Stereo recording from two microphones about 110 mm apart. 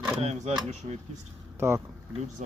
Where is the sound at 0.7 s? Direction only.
80° right.